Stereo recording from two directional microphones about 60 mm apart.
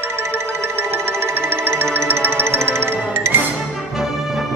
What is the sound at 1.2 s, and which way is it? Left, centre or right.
Music, right.